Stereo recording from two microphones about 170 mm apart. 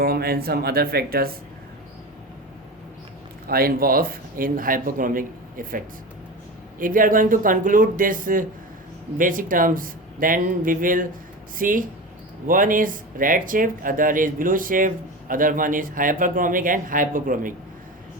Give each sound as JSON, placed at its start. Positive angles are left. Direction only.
{"t": 0.0, "sound": "a man's voice", "side_deg": -65}
{"t": 3.4, "sound": "a man's voice", "side_deg": -60}